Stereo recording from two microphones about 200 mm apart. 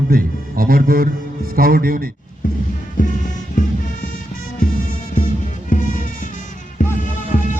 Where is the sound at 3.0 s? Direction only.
40° left (ahead or behind).